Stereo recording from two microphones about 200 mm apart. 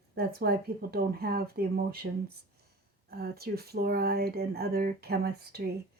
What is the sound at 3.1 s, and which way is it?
Speech, 50° right (ahead or behind).